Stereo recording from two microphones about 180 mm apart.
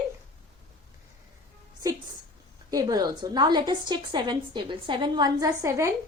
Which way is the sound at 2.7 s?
20° right (ahead or behind).